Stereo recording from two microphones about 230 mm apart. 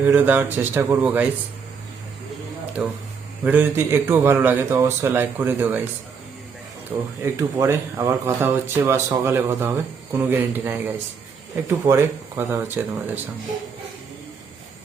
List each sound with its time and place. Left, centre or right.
0.0 s speech: centre
2.8 s speech: centre
6.9 s speech: centre